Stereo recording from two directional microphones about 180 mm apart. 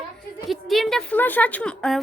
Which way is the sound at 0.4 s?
Centre (ahead or behind).